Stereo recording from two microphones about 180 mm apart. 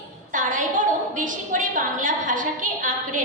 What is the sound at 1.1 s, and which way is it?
A woman's voice, 45° right (ahead or behind).